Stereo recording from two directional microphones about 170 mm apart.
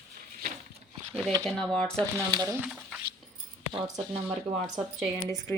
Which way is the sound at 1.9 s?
25° right (ahead or behind).